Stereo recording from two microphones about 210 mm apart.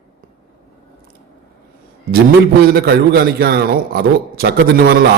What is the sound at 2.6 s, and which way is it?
A man's voice, 50° right (ahead or behind).